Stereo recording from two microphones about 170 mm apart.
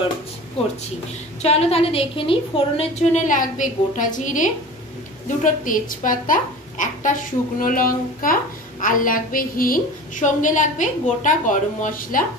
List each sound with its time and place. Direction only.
1.4 s a woman's voice: 40° left (ahead or behind); by 12.3 s 55° left (ahead or behind)